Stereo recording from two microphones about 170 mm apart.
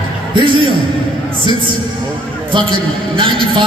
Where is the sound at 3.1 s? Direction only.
30° right (ahead or behind).